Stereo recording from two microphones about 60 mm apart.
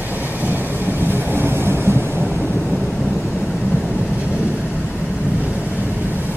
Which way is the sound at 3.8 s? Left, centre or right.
Right.